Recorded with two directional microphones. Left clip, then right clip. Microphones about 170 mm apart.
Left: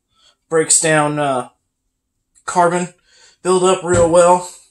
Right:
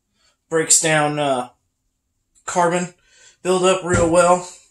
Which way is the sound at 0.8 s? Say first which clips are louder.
Left 3 dB; 25° left (ahead or behind).